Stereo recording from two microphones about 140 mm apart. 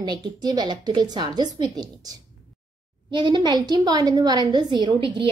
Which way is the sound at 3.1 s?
35° right (ahead or behind).